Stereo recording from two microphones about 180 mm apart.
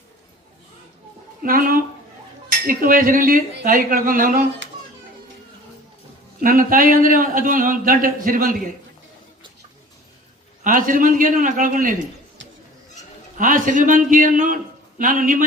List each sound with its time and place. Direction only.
1.4 s speech: 50° right (ahead or behind)
6.4 s speech: 50° right (ahead or behind)
10.6 s speech: 50° right (ahead or behind)
13.4 s speech: 45° right (ahead or behind)